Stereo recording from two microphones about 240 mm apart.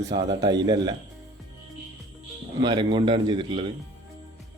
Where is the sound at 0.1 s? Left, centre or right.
Centre.